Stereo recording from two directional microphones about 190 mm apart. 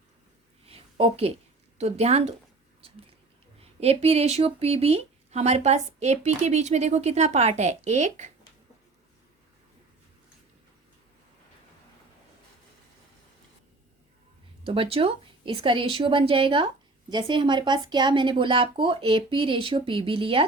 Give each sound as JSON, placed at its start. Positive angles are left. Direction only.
{"t": 0.6, "sound": "a sound", "side_deg": -30}
{"t": 1.8, "sound": "speech", "side_deg": -35}
{"t": 3.6, "sound": "speech", "side_deg": -30}
{"t": 14.6, "sound": "a woman's voice", "side_deg": -30}